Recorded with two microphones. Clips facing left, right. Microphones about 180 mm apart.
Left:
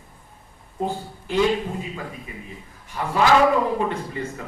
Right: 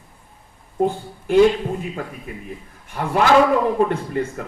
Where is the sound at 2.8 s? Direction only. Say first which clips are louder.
Right 2 dB; 55° right (ahead or behind).